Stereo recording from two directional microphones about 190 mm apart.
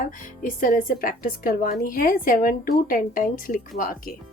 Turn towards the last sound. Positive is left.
turn(degrees=50)  # may be behind; listen again after turning